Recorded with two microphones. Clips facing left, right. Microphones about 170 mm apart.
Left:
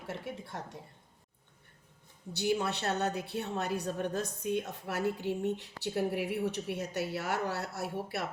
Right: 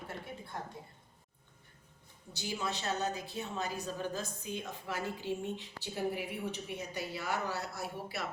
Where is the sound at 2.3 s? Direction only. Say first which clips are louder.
Left 7 dB; 65° left (ahead or behind).